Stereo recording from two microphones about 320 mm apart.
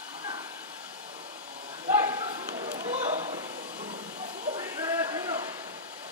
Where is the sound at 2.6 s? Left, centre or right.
Centre.